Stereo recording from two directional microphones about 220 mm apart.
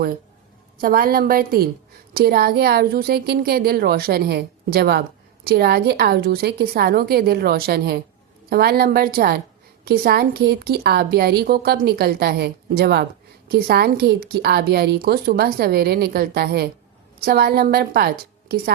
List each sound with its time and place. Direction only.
0.8 s a woman's voice: 40° right (ahead or behind)